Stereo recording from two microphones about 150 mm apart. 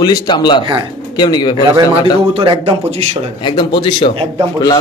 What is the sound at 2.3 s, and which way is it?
Speech, 35° right (ahead or behind).